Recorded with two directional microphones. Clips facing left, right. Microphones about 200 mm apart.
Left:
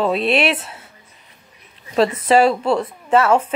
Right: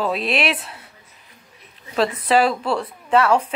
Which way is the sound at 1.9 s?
35° left (ahead or behind).